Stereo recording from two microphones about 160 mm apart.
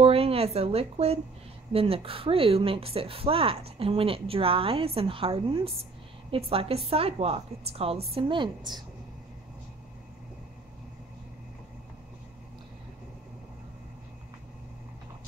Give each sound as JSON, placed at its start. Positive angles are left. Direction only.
{"t": 0.0, "sound": "a woman's voice", "side_deg": -35}